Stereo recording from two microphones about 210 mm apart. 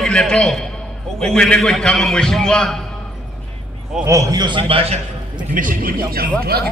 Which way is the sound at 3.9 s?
15° right (ahead or behind).